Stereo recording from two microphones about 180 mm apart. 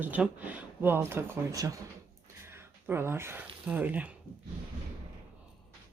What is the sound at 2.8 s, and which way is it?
Speech, 10° right (ahead or behind).